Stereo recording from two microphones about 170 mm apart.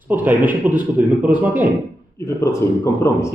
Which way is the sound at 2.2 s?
15° left (ahead or behind).